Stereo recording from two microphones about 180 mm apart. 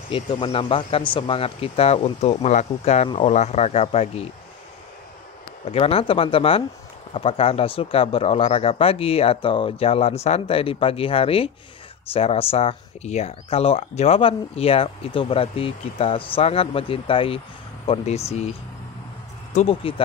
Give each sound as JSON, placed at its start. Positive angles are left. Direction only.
{"t": 0.1, "sound": "speech", "side_deg": 30}
{"t": 5.7, "sound": "speech", "side_deg": 35}